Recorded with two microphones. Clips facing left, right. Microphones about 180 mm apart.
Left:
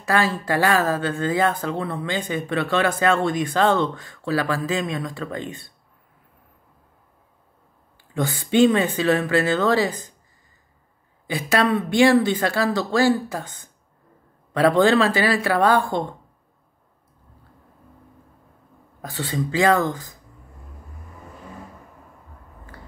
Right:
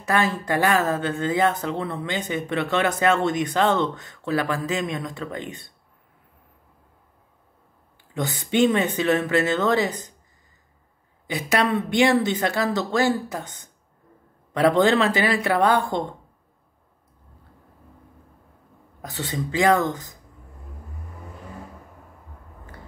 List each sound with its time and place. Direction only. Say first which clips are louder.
0.0 s speech: left 1 dB; 20° right (ahead or behind)
8.1 s speech: left 3 dB; 20° right (ahead or behind)
11.2 s speech: left 2 dB; 20° right (ahead or behind)
18.9 s speech: left 3 dB; 20° right (ahead or behind)